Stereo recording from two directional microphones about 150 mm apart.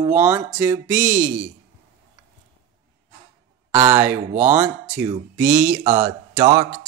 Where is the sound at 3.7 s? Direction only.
15° right (ahead or behind).